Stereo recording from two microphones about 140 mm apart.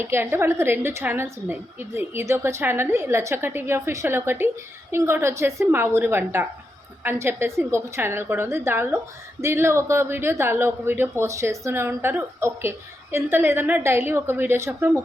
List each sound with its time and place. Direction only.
0.0 s a woman's voice: 15° right (ahead or behind)